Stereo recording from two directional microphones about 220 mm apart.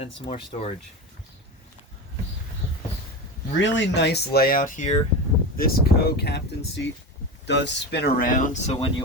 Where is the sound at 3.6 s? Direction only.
50° left (ahead or behind).